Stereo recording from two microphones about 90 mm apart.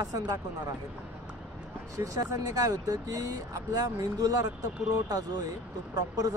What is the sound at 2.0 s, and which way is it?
Speech, 40° right (ahead or behind).